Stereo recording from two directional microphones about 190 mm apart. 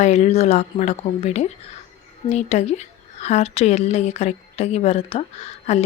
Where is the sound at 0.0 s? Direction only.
35° left (ahead or behind).